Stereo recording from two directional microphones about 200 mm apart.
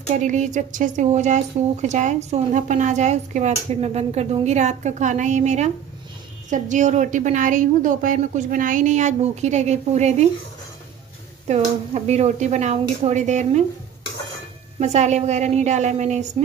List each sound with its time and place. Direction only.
0.1 s a woman's voice: 40° right (ahead or behind)
11.4 s a woman's voice: 35° right (ahead or behind)
14.8 s a woman's voice: 35° right (ahead or behind)